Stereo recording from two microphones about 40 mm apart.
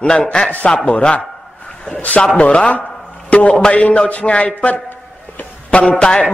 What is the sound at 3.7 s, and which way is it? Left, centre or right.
Speech, left.